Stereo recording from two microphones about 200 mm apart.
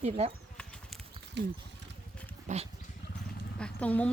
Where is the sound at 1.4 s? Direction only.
60° right (ahead or behind).